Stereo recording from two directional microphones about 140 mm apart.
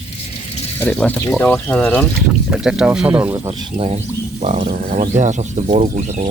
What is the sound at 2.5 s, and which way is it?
Speech, 5° right (ahead or behind).